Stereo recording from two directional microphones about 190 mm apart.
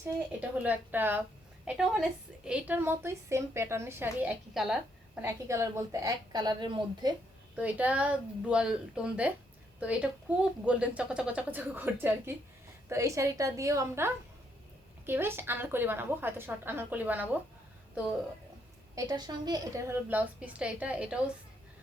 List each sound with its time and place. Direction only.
0.3 s a woman's voice: 10° right (ahead or behind)
5.2 s a woman's voice: 15° right (ahead or behind)
7.5 s a woman's voice: 10° right (ahead or behind)
18.9 s a woman's voice: 20° right (ahead or behind); by 21.2 s 5° right (ahead or behind)